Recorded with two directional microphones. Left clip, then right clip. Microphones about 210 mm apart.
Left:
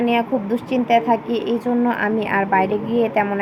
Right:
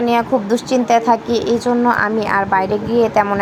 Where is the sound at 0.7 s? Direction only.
65° right (ahead or behind).